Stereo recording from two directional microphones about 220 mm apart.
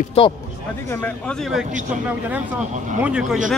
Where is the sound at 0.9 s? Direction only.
5° left (ahead or behind).